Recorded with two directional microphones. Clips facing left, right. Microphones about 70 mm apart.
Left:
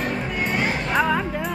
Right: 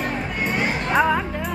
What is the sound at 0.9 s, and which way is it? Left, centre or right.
Music, centre.